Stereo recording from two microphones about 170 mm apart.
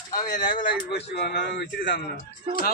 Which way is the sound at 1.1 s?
85° left.